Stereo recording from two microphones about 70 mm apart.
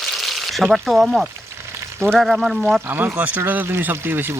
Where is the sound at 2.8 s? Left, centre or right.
Right.